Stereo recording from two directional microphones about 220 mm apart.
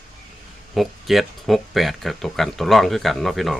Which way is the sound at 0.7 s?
Centre (ahead or behind).